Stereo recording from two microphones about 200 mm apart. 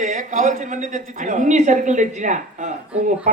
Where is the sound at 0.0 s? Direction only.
40° right (ahead or behind).